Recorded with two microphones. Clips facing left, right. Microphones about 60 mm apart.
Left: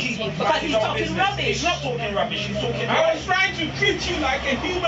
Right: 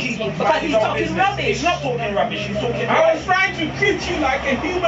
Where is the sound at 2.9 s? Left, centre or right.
Centre.